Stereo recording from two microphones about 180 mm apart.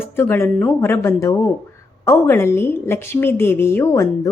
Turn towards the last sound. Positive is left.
turn(degrees=15)  # may be behind; listen again after turning